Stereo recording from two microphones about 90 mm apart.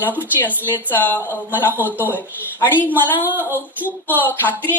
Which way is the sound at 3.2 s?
25° right (ahead or behind).